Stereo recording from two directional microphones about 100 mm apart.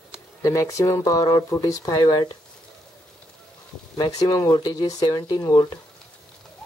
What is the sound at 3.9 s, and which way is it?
Speech, 45° left (ahead or behind).